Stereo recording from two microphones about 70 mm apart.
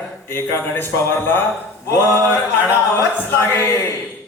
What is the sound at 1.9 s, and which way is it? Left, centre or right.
Speech, left.